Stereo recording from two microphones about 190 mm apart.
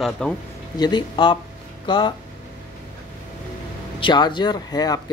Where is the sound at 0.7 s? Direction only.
20° left (ahead or behind).